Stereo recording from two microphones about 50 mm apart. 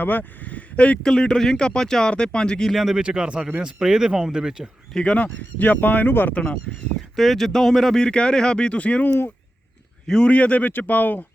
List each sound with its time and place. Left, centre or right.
0.0 s speech: left
1.0 s speech: centre
2.6 s speech: centre
2.9 s speech: centre
5.1 s speech: left
6.3 s speech: left
7.2 s speech: centre; by 11.3 s left